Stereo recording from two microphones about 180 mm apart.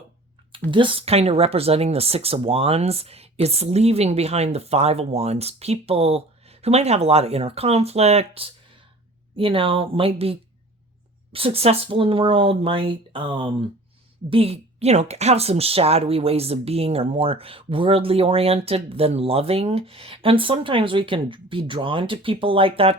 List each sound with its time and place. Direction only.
0.7 s speech: 30° right (ahead or behind)